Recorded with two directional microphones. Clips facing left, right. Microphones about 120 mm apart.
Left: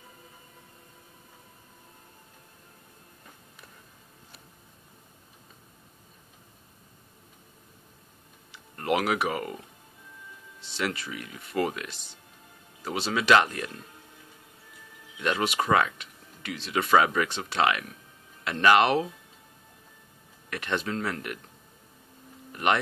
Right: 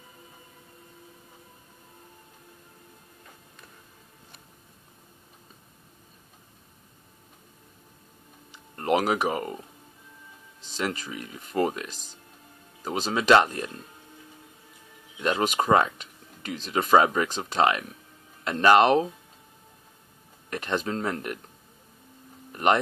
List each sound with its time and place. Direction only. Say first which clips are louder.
8.5 s speech: right 2 dB; 35° right (ahead or behind)
10.6 s speech: right 1 dB; 40° right (ahead or behind)
15.1 s speech: right 2 dB; 30° right (ahead or behind)
20.4 s speech: right 2 dB; 35° right (ahead or behind)
22.5 s speech: right 3 dB; 35° right (ahead or behind)